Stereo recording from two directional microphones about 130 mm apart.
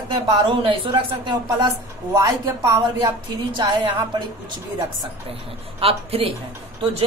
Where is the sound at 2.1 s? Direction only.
25° right (ahead or behind).